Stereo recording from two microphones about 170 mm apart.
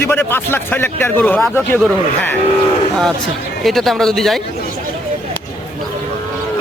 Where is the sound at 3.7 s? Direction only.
Centre (ahead or behind).